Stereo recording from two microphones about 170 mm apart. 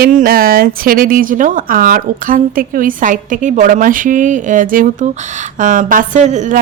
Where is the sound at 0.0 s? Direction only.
55° right (ahead or behind).